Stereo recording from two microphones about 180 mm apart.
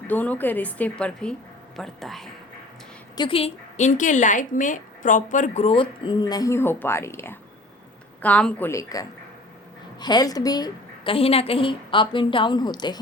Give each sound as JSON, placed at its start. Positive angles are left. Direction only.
{"t": 0.1, "sound": "a woman's voice", "side_deg": 10}
{"t": 3.2, "sound": "a woman's voice", "side_deg": 30}